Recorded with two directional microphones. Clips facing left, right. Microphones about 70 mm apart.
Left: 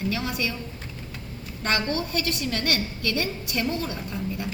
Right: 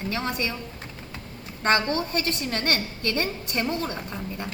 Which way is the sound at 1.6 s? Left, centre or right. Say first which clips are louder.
Right 3 dB; right.